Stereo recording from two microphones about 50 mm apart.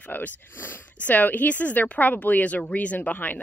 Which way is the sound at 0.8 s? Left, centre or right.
Left.